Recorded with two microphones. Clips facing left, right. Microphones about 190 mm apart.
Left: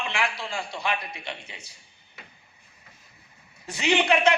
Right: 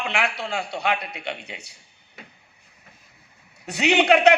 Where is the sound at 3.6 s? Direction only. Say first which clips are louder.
Right 4 dB; 70° right (ahead or behind).